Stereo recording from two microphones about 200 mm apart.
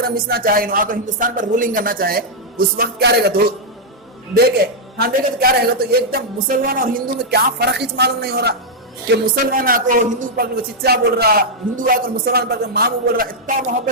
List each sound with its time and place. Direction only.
0.0 s speech: 50° right (ahead or behind)
4.9 s speech: 45° right (ahead or behind)